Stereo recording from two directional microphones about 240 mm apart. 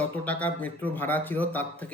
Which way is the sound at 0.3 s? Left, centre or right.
Centre.